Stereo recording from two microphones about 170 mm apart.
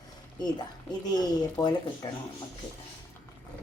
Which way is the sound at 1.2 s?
25° left (ahead or behind).